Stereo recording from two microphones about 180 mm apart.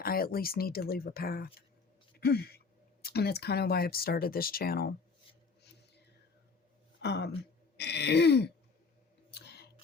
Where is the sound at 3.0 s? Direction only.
60° left (ahead or behind).